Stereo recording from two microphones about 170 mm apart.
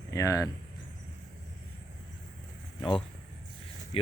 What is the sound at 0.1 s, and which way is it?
Speech, 20° left (ahead or behind).